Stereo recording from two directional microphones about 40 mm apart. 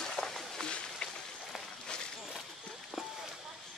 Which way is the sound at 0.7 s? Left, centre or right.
Left.